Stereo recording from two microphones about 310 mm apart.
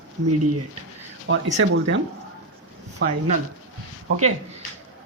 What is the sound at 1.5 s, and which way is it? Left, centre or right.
Speech, right.